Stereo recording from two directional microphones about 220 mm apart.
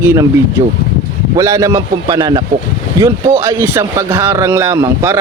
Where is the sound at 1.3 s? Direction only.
15° right (ahead or behind).